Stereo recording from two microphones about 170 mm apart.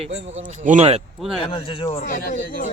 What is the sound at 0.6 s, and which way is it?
Speech, 45° right (ahead or behind).